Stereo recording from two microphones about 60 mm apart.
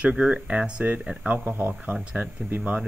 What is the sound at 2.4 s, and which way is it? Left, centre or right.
Speech, right.